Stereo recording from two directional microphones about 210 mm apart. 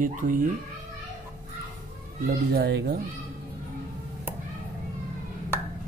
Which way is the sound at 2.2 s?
50° right (ahead or behind).